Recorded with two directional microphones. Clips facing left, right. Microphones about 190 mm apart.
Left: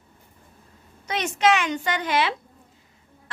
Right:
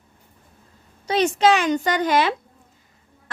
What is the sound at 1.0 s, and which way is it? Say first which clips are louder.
A woman's voice: right 4 dB; 35° right (ahead or behind).